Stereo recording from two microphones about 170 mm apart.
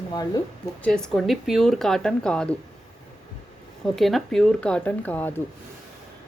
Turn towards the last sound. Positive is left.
turn(degrees=10)  # may be behind; listen again after turning